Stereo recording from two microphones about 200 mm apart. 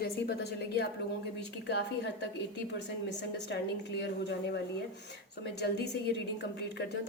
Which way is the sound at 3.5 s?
60° left (ahead or behind).